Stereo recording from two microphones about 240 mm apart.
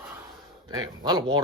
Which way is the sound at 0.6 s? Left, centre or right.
Centre.